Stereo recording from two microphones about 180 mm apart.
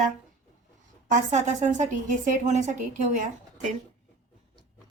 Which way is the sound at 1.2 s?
40° right (ahead or behind).